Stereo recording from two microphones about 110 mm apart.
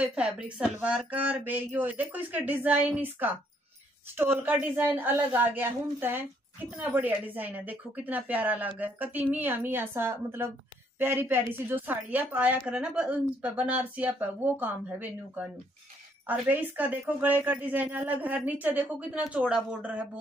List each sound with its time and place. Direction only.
0.0 s a woman's voice: 10° right (ahead or behind)